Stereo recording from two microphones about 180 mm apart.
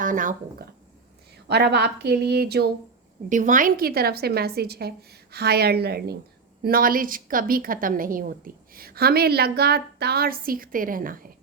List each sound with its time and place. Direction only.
0.0 s a woman's voice: 45° right (ahead or behind)
1.5 s a woman's voice: 65° right (ahead or behind)
3.2 s a woman's voice: 45° right (ahead or behind)